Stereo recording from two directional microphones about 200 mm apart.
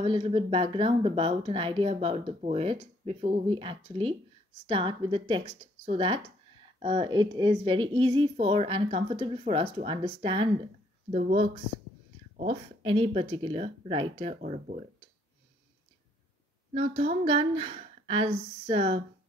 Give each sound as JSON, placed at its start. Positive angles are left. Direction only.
{"t": 0.0, "sound": "speech", "side_deg": -30}
{"t": 14.4, "sound": "speech", "side_deg": -40}
{"t": 16.7, "sound": "speech", "side_deg": -30}